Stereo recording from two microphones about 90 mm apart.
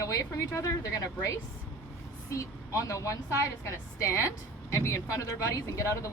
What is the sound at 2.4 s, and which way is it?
A woman's voice, 35° left (ahead or behind).